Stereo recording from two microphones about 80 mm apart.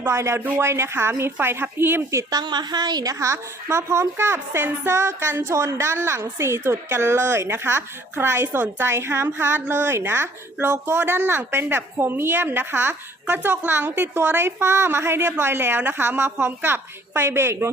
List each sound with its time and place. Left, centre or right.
0.0 s a woman's voice: right
2.3 s a woman's voice: right